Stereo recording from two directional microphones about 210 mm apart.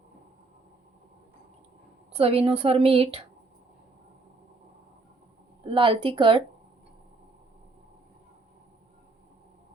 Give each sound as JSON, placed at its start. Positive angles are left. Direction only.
{"t": 2.1, "sound": "a woman's voice", "side_deg": -25}
{"t": 5.6, "sound": "a woman's voice", "side_deg": -25}